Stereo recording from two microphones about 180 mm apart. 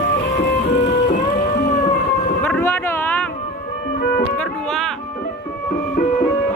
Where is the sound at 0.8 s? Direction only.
45° left (ahead or behind).